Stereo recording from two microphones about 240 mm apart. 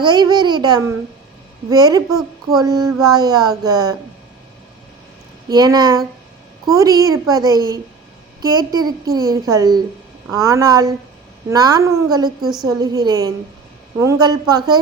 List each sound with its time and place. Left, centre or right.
0.0 s a child's voice: centre
2.0 s a woman's voice: centre
2.6 s a child's voice: centre
5.5 s a child's voice: centre